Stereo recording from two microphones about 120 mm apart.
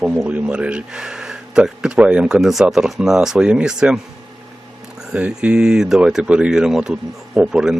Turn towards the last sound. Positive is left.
turn(degrees=-5)  # may be behind; listen again after turning